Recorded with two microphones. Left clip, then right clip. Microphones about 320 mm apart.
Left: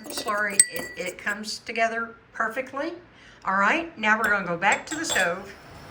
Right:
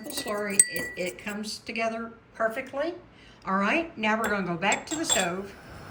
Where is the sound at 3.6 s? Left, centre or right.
Centre.